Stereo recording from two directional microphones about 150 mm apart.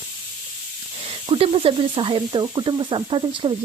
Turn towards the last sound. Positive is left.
turn(degrees=-35)  # may be behind; listen again after turning